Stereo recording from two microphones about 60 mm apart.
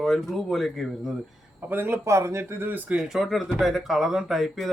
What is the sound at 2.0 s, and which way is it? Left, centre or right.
Speech, right.